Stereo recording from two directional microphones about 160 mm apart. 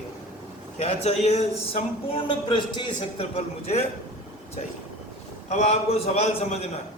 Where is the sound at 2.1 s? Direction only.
30° left (ahead or behind).